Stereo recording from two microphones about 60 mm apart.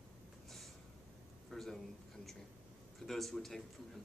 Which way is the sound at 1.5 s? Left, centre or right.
Centre.